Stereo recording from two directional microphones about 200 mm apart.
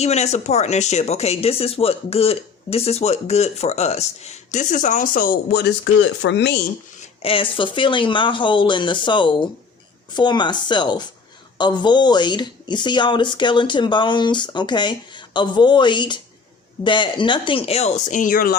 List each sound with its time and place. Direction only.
0.0 s speech: 35° left (ahead or behind); by 6.6 s 60° left (ahead or behind)
7.2 s speech: 25° left (ahead or behind); by 18.5 s 45° left (ahead or behind)